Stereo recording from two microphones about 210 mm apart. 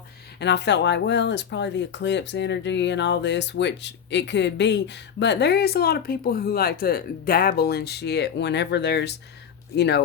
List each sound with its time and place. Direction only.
0.3 s speech: 55° left (ahead or behind)